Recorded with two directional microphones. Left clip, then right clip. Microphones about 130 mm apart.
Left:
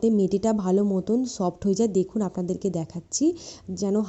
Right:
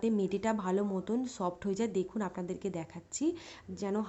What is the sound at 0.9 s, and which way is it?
Speech, 5° left (ahead or behind).